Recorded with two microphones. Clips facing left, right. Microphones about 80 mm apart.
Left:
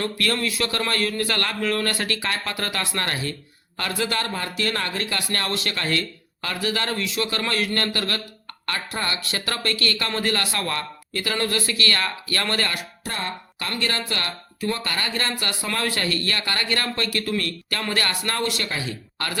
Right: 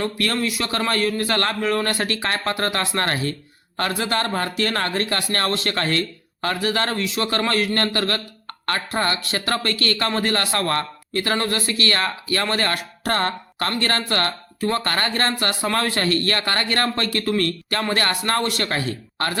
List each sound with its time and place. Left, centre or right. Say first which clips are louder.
0.0 s speech: right 2 dB; right
13.1 s speech: right 8 dB; right
13.6 s speech: right 4 dB; right